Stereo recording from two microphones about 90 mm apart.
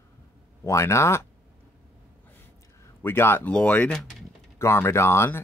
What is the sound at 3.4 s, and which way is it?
Speech, 15° left (ahead or behind).